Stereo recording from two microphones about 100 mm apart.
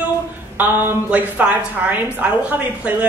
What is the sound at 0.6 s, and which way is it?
A woman's voice, 20° right (ahead or behind).